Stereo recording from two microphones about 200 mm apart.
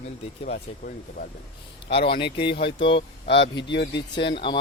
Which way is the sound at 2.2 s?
25° left (ahead or behind).